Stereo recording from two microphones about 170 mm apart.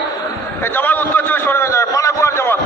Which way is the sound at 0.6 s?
10° left (ahead or behind).